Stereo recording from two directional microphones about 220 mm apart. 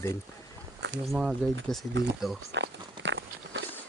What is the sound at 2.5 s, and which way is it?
Walk, 55° right (ahead or behind).